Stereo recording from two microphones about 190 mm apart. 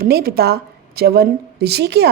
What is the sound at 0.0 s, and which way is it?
A woman's voice, 50° right (ahead or behind).